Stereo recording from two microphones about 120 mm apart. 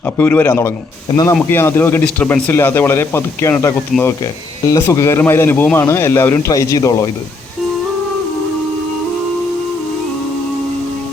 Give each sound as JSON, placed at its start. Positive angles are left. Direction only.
{"t": 0.2, "sound": "a man's voice", "side_deg": 15}
{"t": 1.1, "sound": "speech", "side_deg": 35}
{"t": 1.5, "sound": "speech", "side_deg": 20}
{"t": 3.9, "sound": "speech", "side_deg": 0}
{"t": 4.7, "sound": "speech", "side_deg": 25}